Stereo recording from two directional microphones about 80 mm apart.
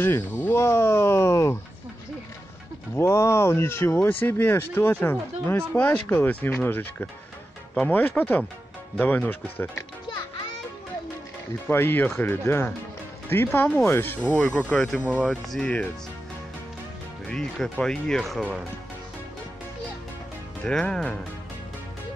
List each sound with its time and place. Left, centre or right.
0.0 s speech: left
3.0 s speech: left
11.6 s speech: left
14.2 s speech: centre
15.0 s speech: right
15.2 s speech: centre
17.3 s speech: centre
20.6 s speech: centre